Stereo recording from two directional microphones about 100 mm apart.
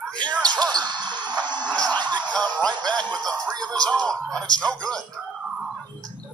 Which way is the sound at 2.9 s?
45° right (ahead or behind).